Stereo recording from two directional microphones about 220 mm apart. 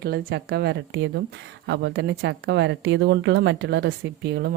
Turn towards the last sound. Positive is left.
turn(degrees=-45)  # may be behind; listen again after turning